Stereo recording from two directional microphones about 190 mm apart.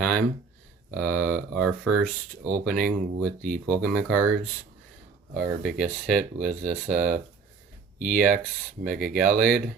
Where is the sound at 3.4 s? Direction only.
45° right (ahead or behind).